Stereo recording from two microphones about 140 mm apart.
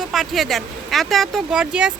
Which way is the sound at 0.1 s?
Centre (ahead or behind).